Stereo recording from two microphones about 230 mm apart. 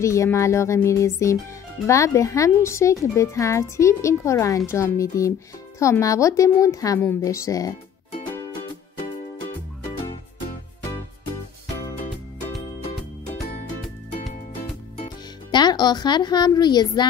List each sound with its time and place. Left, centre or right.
0.0 s speech: centre
15.0 s music: centre